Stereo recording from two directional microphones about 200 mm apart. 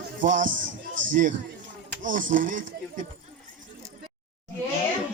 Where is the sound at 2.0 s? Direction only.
40° right (ahead or behind).